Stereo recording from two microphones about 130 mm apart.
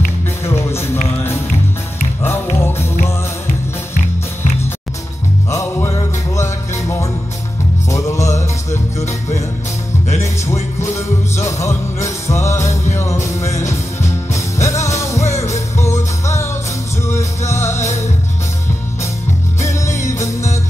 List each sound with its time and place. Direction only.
0.5 s music: 20° left (ahead or behind)
5.5 s music: 25° left (ahead or behind)
11.0 s music: 20° left (ahead or behind)
17.5 s music: 20° left (ahead or behind)
19.6 s music: 25° left (ahead or behind)